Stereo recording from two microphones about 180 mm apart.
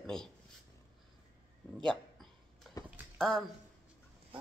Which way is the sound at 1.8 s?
Centre (ahead or behind).